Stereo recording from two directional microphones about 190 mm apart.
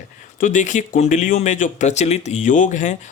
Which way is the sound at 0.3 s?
40° left (ahead or behind).